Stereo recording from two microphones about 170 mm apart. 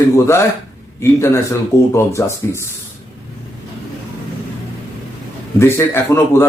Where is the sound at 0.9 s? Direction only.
15° left (ahead or behind).